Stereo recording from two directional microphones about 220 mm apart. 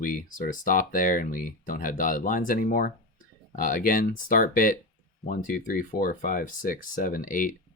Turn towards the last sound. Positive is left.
turn(degrees=40)  # may be behind; listen again after turning